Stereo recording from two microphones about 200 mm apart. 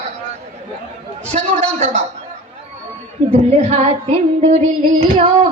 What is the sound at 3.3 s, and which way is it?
Tabla, 30° right (ahead or behind).